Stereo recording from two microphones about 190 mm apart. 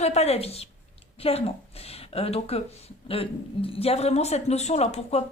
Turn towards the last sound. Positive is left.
turn(degrees=35)  # may be behind; listen again after turning